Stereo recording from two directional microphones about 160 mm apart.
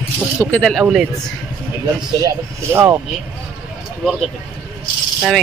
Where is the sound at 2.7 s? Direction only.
15° right (ahead or behind).